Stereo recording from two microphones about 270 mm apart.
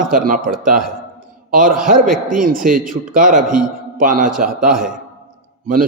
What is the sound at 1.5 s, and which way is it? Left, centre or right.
A man's voice, right.